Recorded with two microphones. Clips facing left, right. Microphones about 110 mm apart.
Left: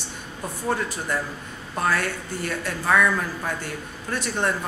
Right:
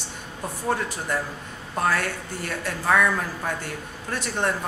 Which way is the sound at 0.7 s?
40° right (ahead or behind).